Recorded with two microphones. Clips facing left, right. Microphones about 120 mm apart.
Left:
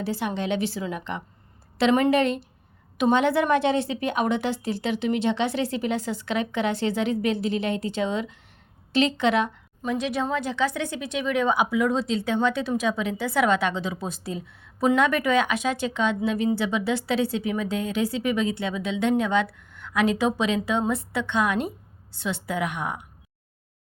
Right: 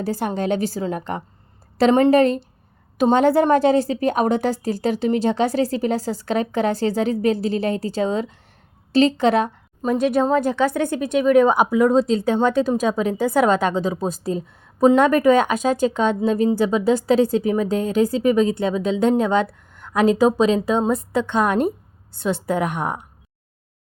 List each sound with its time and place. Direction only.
0.0 s a woman's voice: 40° right (ahead or behind)